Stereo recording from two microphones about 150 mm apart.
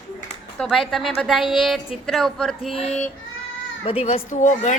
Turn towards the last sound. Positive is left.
turn(degrees=50)  # may be behind; listen again after turning